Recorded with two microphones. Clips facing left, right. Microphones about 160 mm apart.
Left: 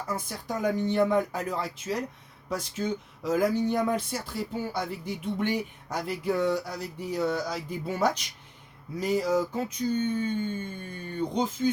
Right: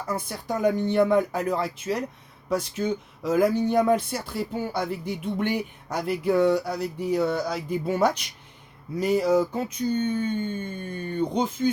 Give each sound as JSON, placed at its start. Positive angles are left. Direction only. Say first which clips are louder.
{"t": 0.3, "sound": "speech", "louder": "right 6 dB", "side_deg": -65}